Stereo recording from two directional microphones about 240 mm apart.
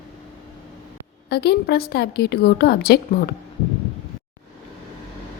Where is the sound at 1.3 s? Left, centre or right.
Left.